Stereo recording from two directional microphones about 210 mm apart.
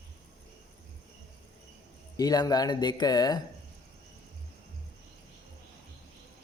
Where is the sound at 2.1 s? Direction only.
20° left (ahead or behind).